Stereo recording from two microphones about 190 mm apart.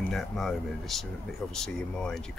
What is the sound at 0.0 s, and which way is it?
Speech, centre (ahead or behind).